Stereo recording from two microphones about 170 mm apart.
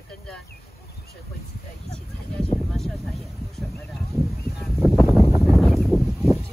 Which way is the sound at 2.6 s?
Centre (ahead or behind).